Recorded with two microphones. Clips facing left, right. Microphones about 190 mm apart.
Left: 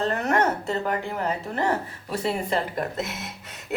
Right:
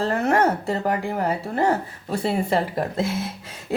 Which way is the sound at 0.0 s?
30° right (ahead or behind).